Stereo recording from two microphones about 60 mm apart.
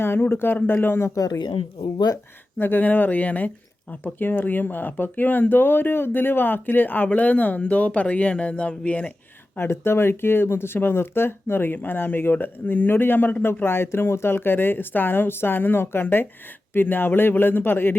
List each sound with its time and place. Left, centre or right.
0.0 s speech: left
2.6 s speech: left
9.6 s speech: left